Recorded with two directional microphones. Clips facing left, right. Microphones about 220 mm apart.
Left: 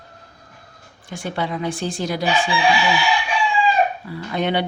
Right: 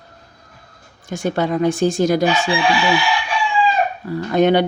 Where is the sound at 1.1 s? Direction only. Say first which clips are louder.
Right 6 dB; 45° right (ahead or behind).